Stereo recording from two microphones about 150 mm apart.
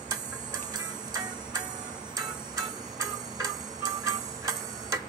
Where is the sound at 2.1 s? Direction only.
25° right (ahead or behind).